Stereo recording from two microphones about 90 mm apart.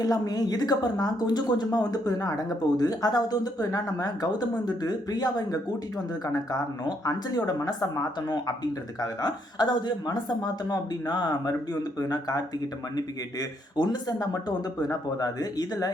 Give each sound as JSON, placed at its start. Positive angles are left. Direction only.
{"t": 0.0, "sound": "speech", "side_deg": 45}
{"t": 13.7, "sound": "speech", "side_deg": 50}